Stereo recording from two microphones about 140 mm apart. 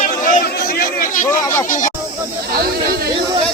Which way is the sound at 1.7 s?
70° left (ahead or behind).